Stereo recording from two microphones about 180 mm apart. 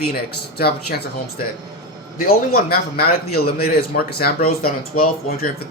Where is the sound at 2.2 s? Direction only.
55° left (ahead or behind).